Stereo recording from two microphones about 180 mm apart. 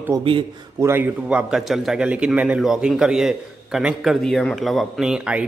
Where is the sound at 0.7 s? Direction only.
15° right (ahead or behind).